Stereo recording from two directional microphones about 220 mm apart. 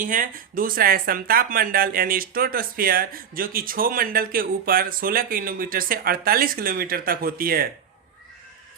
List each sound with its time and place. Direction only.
0.0 s speech: 40° right (ahead or behind)